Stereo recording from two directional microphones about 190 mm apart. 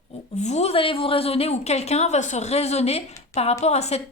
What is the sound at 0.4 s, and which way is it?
Speech, 35° left (ahead or behind).